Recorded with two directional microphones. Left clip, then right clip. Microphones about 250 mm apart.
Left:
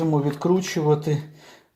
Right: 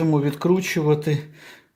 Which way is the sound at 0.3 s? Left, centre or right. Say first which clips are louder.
Right 1 dB; right.